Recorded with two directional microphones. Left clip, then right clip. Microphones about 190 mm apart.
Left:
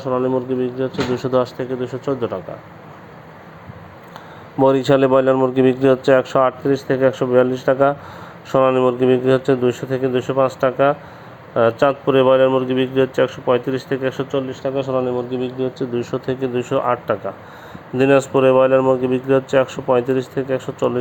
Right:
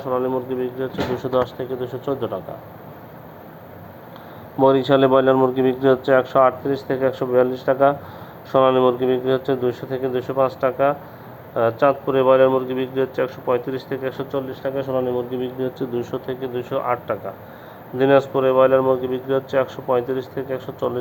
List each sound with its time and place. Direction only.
0.0 s speech: 35° left (ahead or behind)
4.6 s speech: 35° left (ahead or behind)
14.3 s speech: 15° left (ahead or behind)
14.6 s speech: 30° left (ahead or behind)
16.2 s speech: 45° left (ahead or behind)